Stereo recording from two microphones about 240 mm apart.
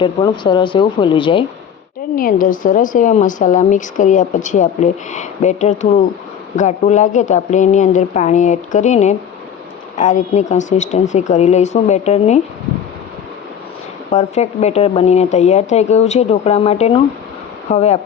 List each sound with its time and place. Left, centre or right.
0.0 s speech: centre
2.1 s a woman's voice: left
14.1 s speech: left